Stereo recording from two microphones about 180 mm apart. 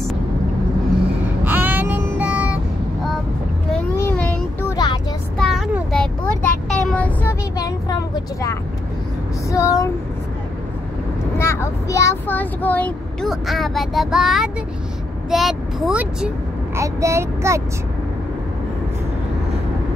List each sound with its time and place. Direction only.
1.4 s a sound: 10° right (ahead or behind)
3.9 s child singing: 10° left (ahead or behind)
4.7 s vehicle: 25° left (ahead or behind)
5.4 s child singing: centre (ahead or behind)
6.9 s vehicle: 10° left (ahead or behind)
7.5 s vehicle: 20° left (ahead or behind)
9.5 s a sound: 15° left (ahead or behind)
11.3 s vehicle: 15° left (ahead or behind); by 14.5 s centre (ahead or behind)
15.2 s speech: centre (ahead or behind)
16.7 s speech: 15° right (ahead or behind)